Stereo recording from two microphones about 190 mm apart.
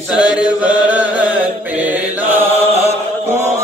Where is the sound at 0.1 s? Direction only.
5° right (ahead or behind).